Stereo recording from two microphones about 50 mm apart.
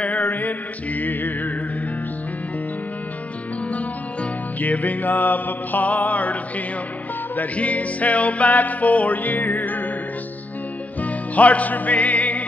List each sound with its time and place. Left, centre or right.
0.0 s music: left
3.6 s music: left
7.3 s music: left
11.0 s music: left